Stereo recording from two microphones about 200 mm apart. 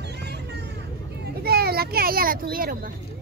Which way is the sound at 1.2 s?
50° right (ahead or behind).